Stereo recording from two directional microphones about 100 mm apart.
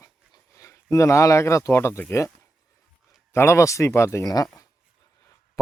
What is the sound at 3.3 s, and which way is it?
Speech, 25° left (ahead or behind).